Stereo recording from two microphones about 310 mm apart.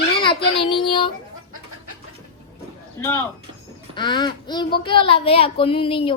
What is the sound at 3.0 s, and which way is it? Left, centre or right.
A woman's voice, centre.